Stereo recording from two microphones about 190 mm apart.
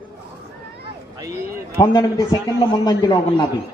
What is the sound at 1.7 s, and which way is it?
A man's voice, 20° left (ahead or behind).